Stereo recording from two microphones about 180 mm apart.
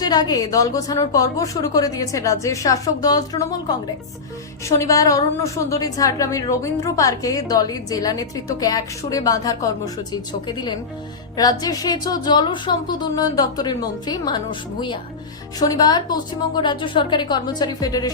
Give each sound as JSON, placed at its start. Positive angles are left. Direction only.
{"t": 0.0, "sound": "a woman's voice", "side_deg": 20}
{"t": 4.8, "sound": "a woman's voice", "side_deg": 20}